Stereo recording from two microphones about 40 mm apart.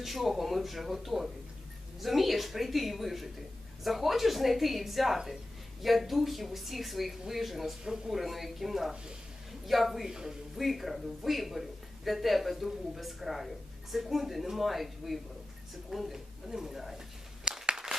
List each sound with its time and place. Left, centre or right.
0.0 s a woman's voice: centre
10.1 s speech: centre
10.6 s a woman's voice: centre
17.7 s applause: centre